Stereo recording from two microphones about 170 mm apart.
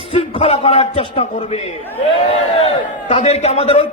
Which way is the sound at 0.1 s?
35° left (ahead or behind).